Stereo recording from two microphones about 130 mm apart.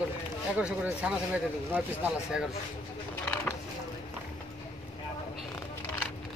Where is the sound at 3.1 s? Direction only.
15° left (ahead or behind).